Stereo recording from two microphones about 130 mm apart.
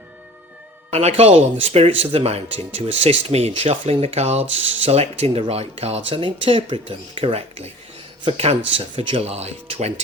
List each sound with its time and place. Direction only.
0.9 s speech: 55° right (ahead or behind)